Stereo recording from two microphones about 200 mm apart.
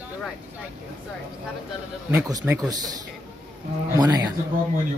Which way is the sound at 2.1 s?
10° right (ahead or behind).